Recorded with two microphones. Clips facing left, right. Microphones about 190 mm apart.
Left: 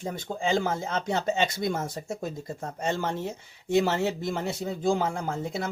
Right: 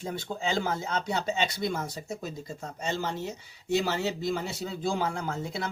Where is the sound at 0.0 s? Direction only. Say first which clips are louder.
Left 2 dB; 45° left (ahead or behind).